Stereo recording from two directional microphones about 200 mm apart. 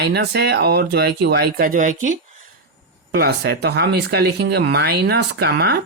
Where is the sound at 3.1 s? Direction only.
50° right (ahead or behind).